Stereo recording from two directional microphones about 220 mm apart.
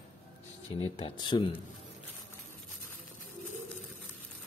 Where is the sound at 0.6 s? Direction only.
25° left (ahead or behind).